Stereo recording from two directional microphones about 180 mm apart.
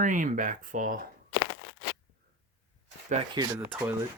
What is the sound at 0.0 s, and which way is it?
Speech, 45° right (ahead or behind).